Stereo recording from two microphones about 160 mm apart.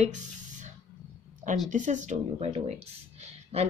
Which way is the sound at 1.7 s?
50° right (ahead or behind).